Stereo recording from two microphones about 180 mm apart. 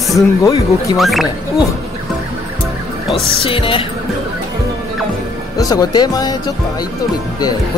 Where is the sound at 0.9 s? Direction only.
Centre (ahead or behind).